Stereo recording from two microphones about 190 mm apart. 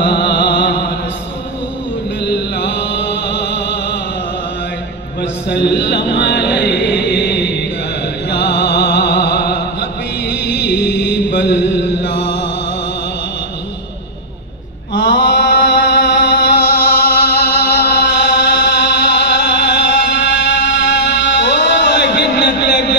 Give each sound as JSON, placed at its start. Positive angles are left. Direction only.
{"t": 0.0, "sound": "music", "side_deg": 60}
{"t": 2.2, "sound": "music", "side_deg": 65}
{"t": 5.5, "sound": "a sound", "side_deg": 60}
{"t": 8.3, "sound": "music", "side_deg": 60}
{"t": 10.8, "sound": "mantra", "side_deg": 60}
{"t": 15.0, "sound": "mantra", "side_deg": 65}